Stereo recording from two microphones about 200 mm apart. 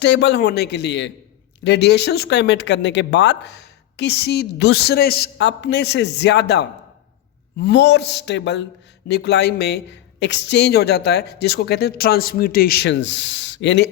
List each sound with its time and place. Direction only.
0.0 s speech: 60° left (ahead or behind)